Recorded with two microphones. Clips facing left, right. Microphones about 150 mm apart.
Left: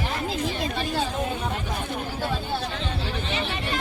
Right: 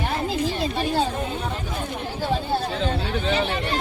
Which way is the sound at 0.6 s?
30° right (ahead or behind).